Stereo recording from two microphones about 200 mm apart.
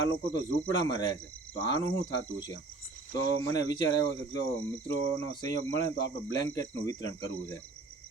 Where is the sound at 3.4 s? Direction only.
20° left (ahead or behind).